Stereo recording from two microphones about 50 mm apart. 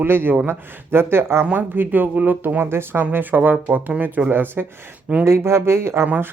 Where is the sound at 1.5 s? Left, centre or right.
Right.